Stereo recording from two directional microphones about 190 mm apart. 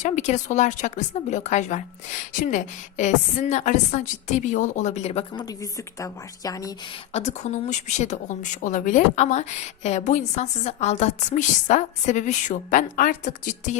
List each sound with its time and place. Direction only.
0.0 s a woman's voice: 40° left (ahead or behind)
5.3 s speech: 20° left (ahead or behind)
7.1 s a woman's voice: 35° left (ahead or behind)